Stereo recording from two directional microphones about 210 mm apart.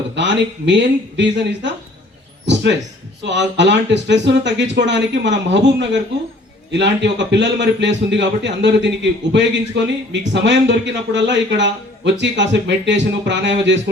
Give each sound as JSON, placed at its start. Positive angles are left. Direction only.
{"t": 0.2, "sound": "a man's voice", "side_deg": -60}
{"t": 3.2, "sound": "a man's voice", "side_deg": -55}